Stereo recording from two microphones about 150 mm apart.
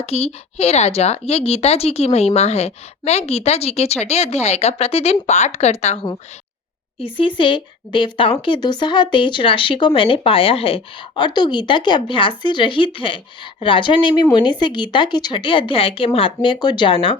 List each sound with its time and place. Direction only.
0.0 s a woman's voice: 45° left (ahead or behind)
7.0 s speech: 35° left (ahead or behind)